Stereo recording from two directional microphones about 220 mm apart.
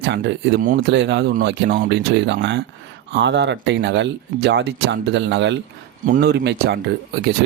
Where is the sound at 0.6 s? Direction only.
40° right (ahead or behind).